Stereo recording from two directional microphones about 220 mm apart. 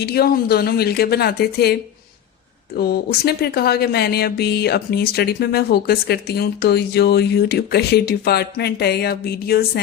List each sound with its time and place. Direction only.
0.0 s speech: 45° left (ahead or behind)